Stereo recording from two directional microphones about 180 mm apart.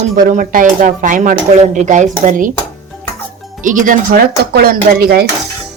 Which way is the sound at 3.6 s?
45° right (ahead or behind).